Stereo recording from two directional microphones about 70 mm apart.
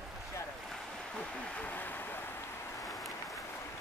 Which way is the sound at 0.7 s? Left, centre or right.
Centre.